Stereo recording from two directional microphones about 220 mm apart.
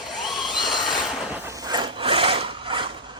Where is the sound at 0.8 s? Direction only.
Centre (ahead or behind); by 2.9 s 25° right (ahead or behind).